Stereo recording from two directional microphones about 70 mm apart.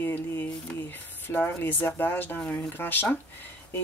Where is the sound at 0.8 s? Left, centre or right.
Left.